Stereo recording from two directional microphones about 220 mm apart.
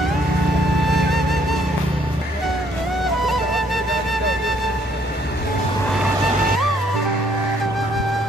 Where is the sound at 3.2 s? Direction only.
Centre (ahead or behind).